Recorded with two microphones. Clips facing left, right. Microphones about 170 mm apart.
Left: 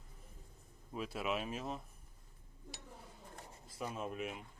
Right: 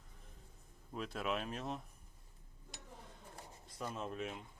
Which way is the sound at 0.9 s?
5° left (ahead or behind).